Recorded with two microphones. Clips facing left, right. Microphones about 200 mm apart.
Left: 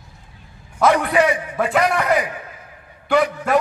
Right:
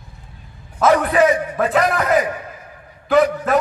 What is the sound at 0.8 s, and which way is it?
A man's voice, centre (ahead or behind).